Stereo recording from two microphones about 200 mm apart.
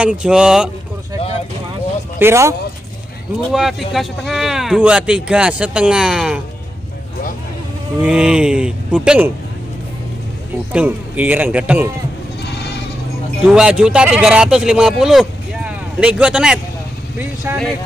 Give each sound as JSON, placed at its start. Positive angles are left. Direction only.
{"t": 0.0, "sound": "a man's voice", "side_deg": -5}
{"t": 2.1, "sound": "speech", "side_deg": -10}
{"t": 3.5, "sound": "a man's voice", "side_deg": 0}
{"t": 8.0, "sound": "a man's voice", "side_deg": -5}
{"t": 10.7, "sound": "a man's voice", "side_deg": -5}
{"t": 12.4, "sound": "sheep", "side_deg": 55}
{"t": 13.5, "sound": "a man's voice", "side_deg": -5}